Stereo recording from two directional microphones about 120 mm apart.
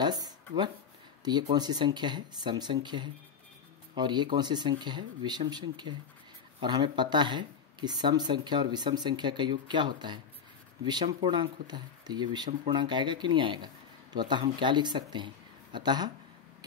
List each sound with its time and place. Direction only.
0.0 s speech: 35° right (ahead or behind)